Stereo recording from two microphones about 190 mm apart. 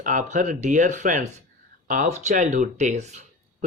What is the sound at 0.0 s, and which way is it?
Speech, 40° right (ahead or behind).